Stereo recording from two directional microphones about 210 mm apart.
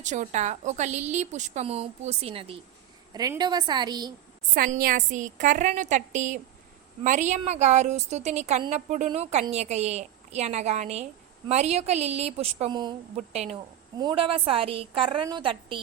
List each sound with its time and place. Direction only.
0.0 s a woman's voice: 35° right (ahead or behind); by 4.1 s 20° right (ahead or behind)
4.5 s a woman's voice: 45° right (ahead or behind); by 13.0 s 20° right (ahead or behind)
13.1 s a woman's voice: 30° right (ahead or behind)